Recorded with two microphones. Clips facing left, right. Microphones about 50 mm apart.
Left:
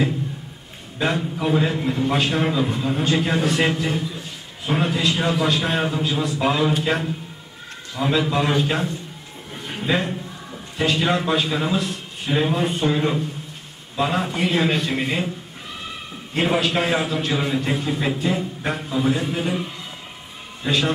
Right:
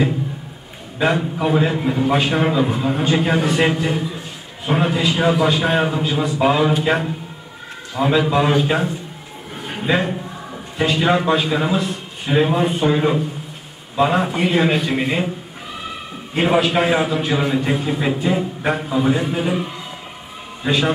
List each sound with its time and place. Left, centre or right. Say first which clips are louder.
0.9 s a man's voice: right 4 dB; centre
9.6 s a sound: right 3 dB; centre
10.8 s a man's voice: right 3 dB; centre
16.3 s a man's voice: right 4 dB; centre